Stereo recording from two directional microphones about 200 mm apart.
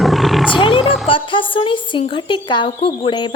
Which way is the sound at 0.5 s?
25° left (ahead or behind).